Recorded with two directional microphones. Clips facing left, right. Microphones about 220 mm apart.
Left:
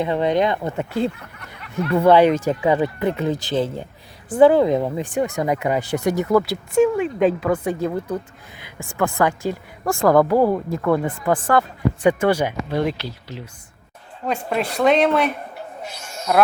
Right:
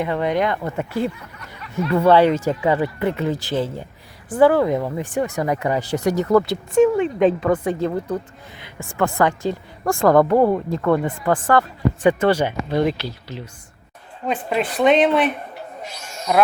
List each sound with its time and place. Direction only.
0.0 s speech: 25° left (ahead or behind)
1.1 s a sound: 60° left (ahead or behind)
2.0 s speech: 15° left (ahead or behind)
14.3 s speech: centre (ahead or behind)